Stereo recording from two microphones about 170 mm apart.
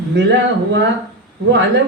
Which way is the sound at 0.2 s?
90° right.